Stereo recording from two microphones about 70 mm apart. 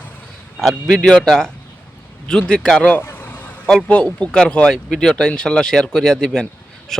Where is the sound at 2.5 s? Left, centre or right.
Centre.